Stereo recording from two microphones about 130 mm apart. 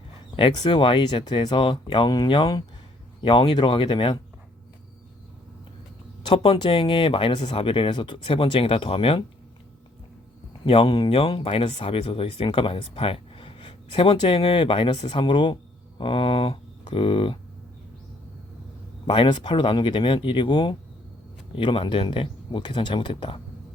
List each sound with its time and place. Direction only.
0.3 s speech: 40° left (ahead or behind)
6.2 s speech: 45° left (ahead or behind)
10.7 s speech: 40° left (ahead or behind)
16.0 s a sound: 40° left (ahead or behind)
19.0 s speech: 40° left (ahead or behind)